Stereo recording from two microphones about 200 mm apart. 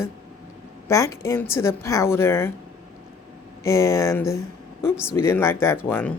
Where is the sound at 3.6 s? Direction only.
15° left (ahead or behind).